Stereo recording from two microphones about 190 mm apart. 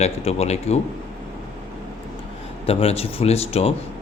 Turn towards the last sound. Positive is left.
turn(degrees=30)  # may be behind; listen again after turning